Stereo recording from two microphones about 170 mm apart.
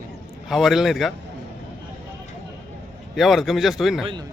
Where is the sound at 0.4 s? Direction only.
Centre (ahead or behind).